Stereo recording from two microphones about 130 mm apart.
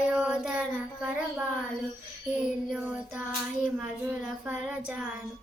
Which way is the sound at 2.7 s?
5° right (ahead or behind).